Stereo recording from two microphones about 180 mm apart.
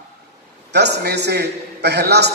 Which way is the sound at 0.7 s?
70° right (ahead or behind).